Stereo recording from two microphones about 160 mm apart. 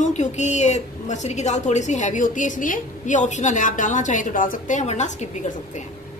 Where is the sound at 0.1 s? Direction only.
45° left (ahead or behind).